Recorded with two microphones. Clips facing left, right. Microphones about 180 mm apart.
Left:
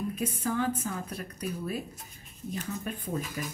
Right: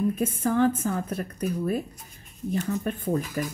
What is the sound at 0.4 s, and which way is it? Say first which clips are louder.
Speech: right 8 dB; 50° right (ahead or behind).